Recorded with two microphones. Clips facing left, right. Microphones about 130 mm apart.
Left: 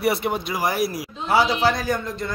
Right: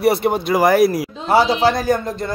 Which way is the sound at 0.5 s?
60° right (ahead or behind).